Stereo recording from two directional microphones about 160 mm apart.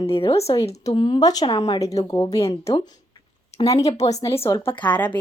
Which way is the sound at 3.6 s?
30° left (ahead or behind).